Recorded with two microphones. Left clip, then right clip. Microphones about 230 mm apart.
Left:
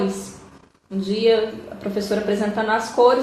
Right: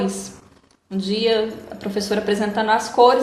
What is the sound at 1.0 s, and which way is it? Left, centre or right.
A woman's voice, right.